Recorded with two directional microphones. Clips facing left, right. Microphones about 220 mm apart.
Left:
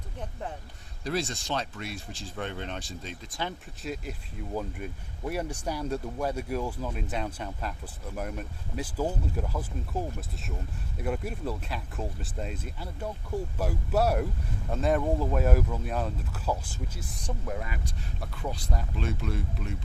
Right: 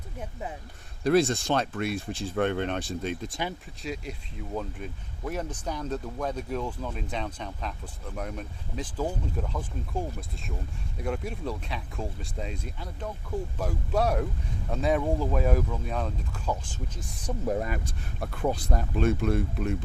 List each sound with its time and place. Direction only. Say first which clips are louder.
0.2 s speech: even; 10° right (ahead or behind)
1.0 s speech: right 9 dB; 55° right (ahead or behind)
3.8 s speech: right 1 dB; centre (ahead or behind)
17.4 s speech: right 9 dB; 40° right (ahead or behind)
18.2 s speech: right 8 dB; 55° right (ahead or behind)